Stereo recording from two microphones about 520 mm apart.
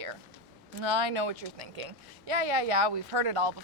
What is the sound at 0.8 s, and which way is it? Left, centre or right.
Speech, right.